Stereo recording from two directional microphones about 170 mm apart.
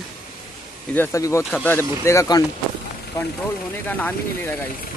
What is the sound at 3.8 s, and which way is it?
Speech, 10° left (ahead or behind).